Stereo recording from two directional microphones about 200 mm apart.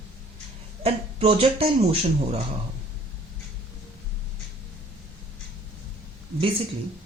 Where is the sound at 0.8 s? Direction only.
30° right (ahead or behind).